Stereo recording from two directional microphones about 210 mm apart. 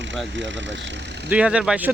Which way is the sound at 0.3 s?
60° right (ahead or behind).